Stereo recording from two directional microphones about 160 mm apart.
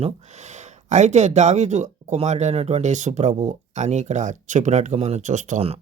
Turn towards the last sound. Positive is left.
turn(degrees=-45)  # may be behind; listen again after turning